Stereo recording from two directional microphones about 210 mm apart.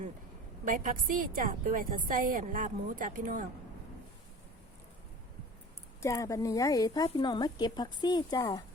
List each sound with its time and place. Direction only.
0.6 s a woman's voice: 40° right (ahead or behind)
6.0 s speech: 15° left (ahead or behind)